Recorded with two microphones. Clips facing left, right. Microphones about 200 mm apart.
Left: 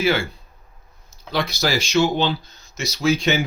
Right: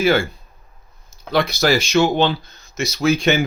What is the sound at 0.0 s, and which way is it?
Speech, 45° right (ahead or behind).